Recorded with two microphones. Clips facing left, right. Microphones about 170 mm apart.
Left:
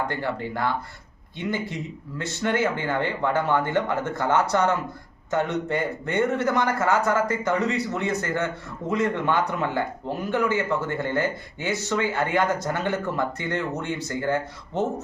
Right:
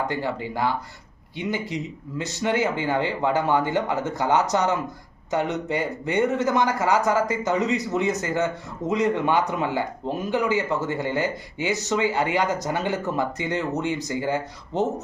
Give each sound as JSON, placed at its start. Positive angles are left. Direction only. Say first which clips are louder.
{"t": 0.1, "sound": "speech", "louder": "right 1 dB", "side_deg": -15}
{"t": 2.4, "sound": "speech", "louder": "right 1 dB", "side_deg": -15}